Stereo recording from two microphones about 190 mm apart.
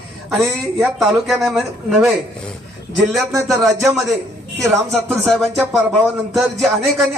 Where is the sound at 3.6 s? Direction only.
Centre (ahead or behind).